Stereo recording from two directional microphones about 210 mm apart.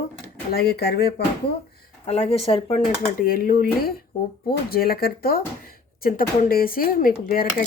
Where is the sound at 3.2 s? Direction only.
40° left (ahead or behind).